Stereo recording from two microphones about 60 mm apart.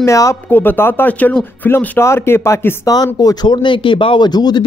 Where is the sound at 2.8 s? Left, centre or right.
Left.